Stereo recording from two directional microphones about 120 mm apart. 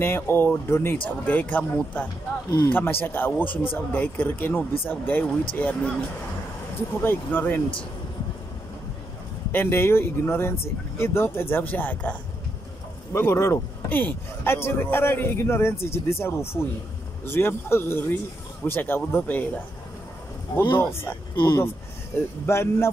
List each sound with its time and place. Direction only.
0.0 s speech: 20° left (ahead or behind)
7.0 s speech: 15° left (ahead or behind)
9.5 s a man's voice: 20° left (ahead or behind)
13.1 s a man's voice: 25° left (ahead or behind)
20.7 s a man's voice: 20° left (ahead or behind)
22.5 s a man's voice: 20° left (ahead or behind)